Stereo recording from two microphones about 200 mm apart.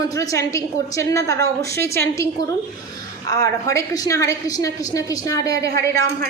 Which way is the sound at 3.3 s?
15° left (ahead or behind).